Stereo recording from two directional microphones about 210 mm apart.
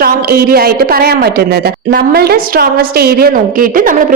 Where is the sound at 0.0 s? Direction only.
45° right (ahead or behind).